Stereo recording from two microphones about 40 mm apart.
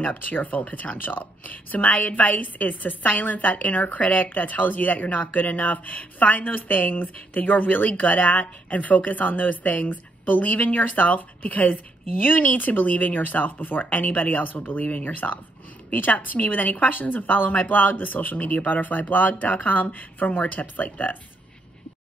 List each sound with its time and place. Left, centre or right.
0.0 s speech: left
1.0 s a woman's voice: left